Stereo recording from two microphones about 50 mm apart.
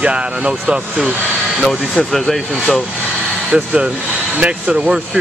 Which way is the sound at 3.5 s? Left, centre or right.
Right.